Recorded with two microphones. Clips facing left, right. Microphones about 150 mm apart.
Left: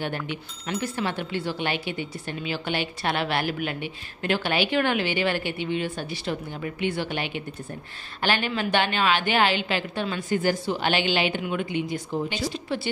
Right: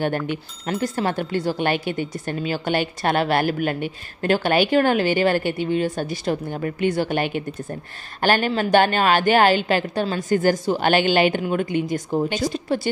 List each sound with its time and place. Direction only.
0.7 s a woman's voice: 45° right (ahead or behind)